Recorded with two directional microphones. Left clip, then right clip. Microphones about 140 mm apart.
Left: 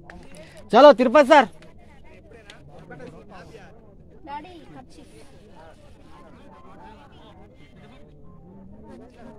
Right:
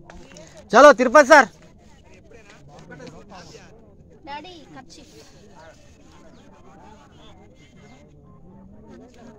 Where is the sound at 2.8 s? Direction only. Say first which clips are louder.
Even; 35° right (ahead or behind).